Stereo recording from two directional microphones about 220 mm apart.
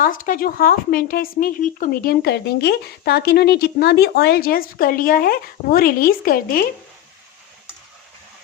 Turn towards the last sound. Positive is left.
turn(degrees=40)  # may be behind; listen again after turning